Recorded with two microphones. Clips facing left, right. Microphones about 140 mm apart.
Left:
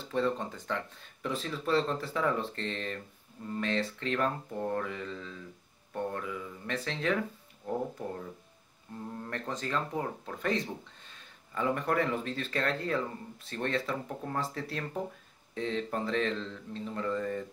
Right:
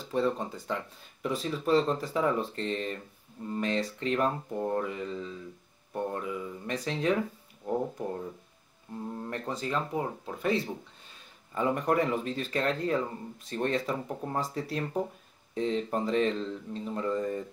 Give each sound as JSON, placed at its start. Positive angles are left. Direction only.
{"t": 0.0, "sound": "speech", "side_deg": -10}
{"t": 9.2, "sound": "speech", "side_deg": -10}